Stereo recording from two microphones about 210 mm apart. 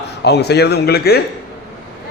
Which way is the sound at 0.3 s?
50° left (ahead or behind).